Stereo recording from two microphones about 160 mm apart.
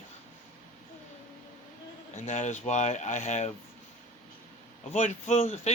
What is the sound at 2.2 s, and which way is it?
Speech, 50° left (ahead or behind).